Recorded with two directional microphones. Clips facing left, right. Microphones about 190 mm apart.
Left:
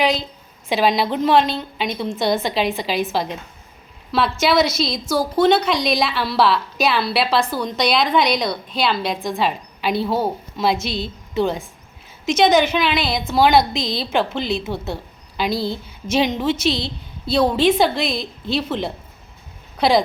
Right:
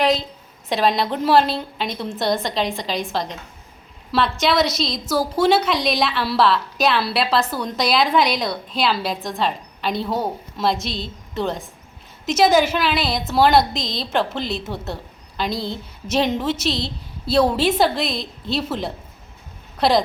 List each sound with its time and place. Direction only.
0.0 s a woman's voice: centre (ahead or behind)